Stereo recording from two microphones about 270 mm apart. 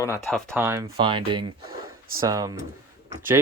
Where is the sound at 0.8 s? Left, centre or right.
Centre.